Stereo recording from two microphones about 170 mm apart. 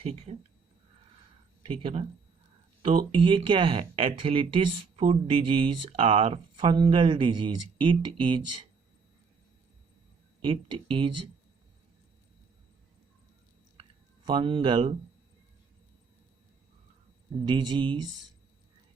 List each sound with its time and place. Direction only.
0.0 s speech: 35° right (ahead or behind)
1.6 s speech: 35° right (ahead or behind)
10.4 s speech: 30° right (ahead or behind)
14.3 s speech: 30° right (ahead or behind)
17.4 s speech: 25° right (ahead or behind)